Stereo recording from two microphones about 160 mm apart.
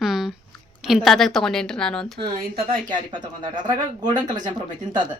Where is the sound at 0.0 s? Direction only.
Centre (ahead or behind).